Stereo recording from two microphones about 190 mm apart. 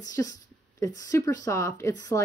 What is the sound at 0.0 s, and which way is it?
A woman's voice, 20° left (ahead or behind).